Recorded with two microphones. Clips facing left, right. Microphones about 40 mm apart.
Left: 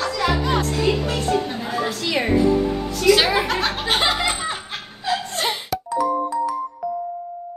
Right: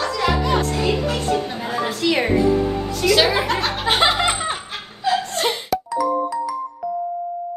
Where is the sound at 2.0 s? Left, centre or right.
Right.